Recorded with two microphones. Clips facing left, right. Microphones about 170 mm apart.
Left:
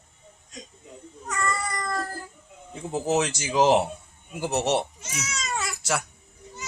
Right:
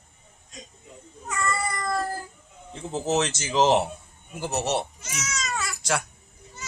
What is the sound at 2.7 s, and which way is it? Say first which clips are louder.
Speech: left 1 dB; 10° left (ahead or behind).